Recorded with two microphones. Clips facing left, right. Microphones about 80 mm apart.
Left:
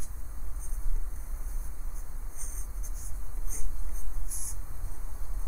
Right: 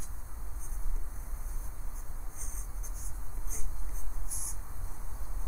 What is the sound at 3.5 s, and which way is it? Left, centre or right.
Writing, centre.